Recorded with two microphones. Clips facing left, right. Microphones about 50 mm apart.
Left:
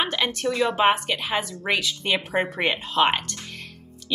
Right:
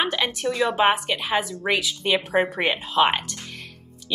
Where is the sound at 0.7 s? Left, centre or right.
Centre.